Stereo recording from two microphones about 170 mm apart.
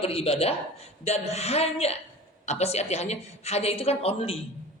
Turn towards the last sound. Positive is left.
turn(degrees=35)  # may be behind; listen again after turning